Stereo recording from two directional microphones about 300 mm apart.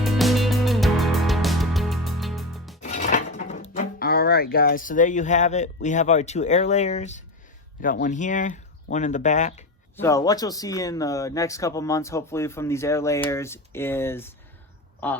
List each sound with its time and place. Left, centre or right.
0.0 s music: centre
2.8 s speech: left
10.0 s speech: centre